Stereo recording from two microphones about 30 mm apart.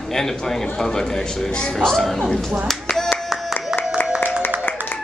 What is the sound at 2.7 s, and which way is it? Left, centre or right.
Clapping, centre.